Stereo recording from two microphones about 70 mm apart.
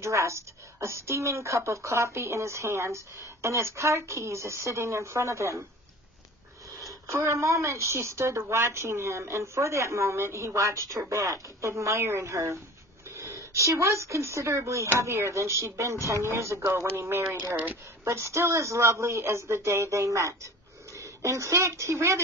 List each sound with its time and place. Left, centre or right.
0.0 s a woman's voice: right
7.1 s a woman's voice: right